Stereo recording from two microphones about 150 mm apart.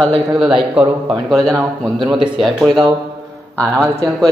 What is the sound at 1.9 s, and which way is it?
Speech, 30° right (ahead or behind).